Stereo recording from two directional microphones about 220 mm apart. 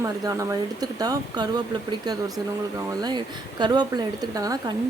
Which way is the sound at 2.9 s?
20° right (ahead or behind).